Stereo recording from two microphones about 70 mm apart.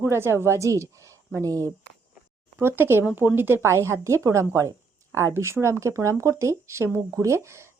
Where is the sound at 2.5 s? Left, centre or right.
Right.